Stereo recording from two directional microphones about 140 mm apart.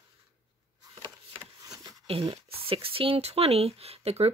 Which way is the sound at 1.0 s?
30° right (ahead or behind).